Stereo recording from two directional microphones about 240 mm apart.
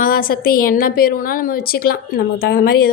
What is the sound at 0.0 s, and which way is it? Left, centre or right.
A woman's voice, left.